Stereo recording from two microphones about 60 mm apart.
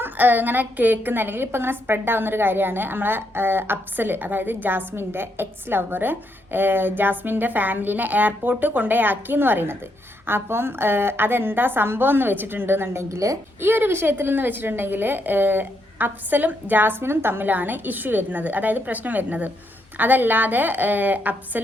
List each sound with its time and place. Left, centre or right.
0.0 s a woman's voice: right
13.6 s a woman's voice: right